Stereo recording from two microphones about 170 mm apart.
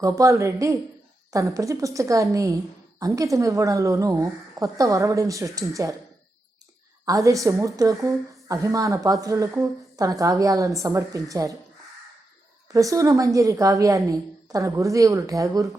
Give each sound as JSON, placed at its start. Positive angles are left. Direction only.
{"t": 0.0, "sound": "a woman's voice", "side_deg": -20}
{"t": 7.0, "sound": "a woman's voice", "side_deg": -20}
{"t": 12.7, "sound": "a woman's voice", "side_deg": -20}